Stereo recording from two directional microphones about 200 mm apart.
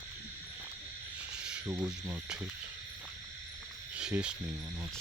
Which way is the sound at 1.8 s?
15° right (ahead or behind).